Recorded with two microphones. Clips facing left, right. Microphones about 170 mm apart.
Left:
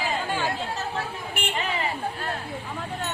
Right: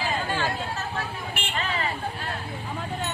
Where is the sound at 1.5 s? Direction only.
15° left (ahead or behind).